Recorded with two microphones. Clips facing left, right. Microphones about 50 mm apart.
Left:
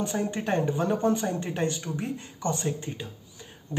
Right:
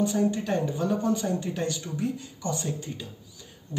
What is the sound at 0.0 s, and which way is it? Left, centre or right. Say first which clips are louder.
Speech: right 4 dB; left.